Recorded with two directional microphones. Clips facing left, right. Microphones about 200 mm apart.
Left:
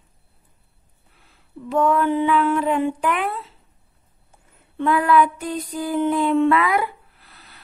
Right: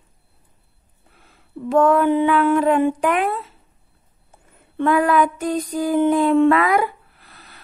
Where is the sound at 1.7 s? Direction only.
50° right (ahead or behind).